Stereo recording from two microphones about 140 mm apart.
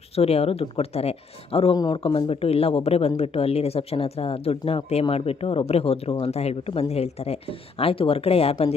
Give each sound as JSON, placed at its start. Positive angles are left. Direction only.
{"t": 0.2, "sound": "speech", "side_deg": 45}
{"t": 1.7, "sound": "speech", "side_deg": 30}